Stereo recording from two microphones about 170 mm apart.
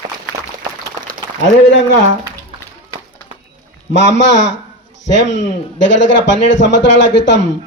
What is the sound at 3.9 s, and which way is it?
A man's voice, 90° left.